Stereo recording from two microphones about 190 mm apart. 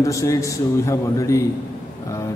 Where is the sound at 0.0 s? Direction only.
15° left (ahead or behind).